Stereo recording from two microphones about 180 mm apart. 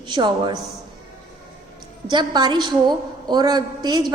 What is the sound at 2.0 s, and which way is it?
A woman's voice, 25° right (ahead or behind).